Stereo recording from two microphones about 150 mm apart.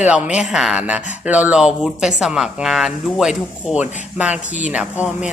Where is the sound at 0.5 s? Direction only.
5° right (ahead or behind).